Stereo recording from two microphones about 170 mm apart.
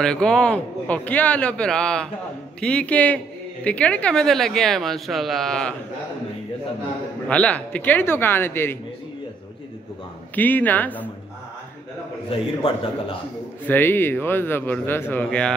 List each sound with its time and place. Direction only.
0.0 s a man's voice: 5° left (ahead or behind)
7.2 s a man's voice: 5° left (ahead or behind)
10.3 s a man's voice: 10° left (ahead or behind)
12.3 s a man's voice: 30° left (ahead or behind)
13.7 s a man's voice: 10° left (ahead or behind)